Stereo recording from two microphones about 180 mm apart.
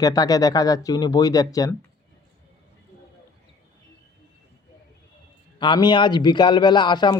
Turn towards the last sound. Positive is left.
turn(degrees=25)  # may be behind; listen again after turning